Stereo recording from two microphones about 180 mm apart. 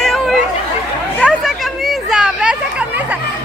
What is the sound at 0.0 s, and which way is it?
Chatter, centre (ahead or behind).